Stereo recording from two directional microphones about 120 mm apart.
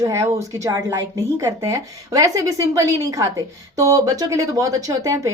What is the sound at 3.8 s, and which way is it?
Speech, 30° right (ahead or behind).